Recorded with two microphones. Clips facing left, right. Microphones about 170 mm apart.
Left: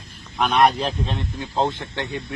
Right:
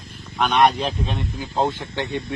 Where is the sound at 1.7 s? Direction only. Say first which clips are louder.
Right 2 dB; 20° right (ahead or behind).